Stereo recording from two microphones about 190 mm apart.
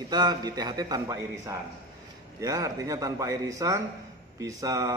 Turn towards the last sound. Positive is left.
turn(degrees=-15)  # may be behind; listen again after turning